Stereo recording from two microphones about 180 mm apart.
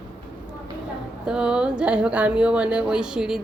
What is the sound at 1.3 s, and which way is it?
Speech, 5° right (ahead or behind).